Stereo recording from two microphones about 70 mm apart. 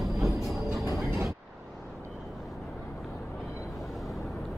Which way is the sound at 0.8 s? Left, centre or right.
Right.